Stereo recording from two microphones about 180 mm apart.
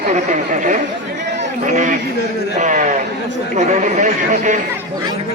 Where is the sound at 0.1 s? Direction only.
45° right (ahead or behind).